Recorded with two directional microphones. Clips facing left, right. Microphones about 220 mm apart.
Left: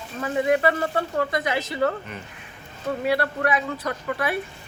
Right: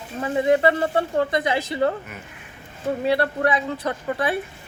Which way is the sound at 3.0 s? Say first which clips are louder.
Right 2 dB; 25° right (ahead or behind).